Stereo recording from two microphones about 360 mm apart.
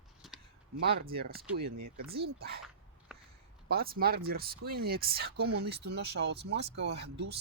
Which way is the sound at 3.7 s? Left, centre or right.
Right.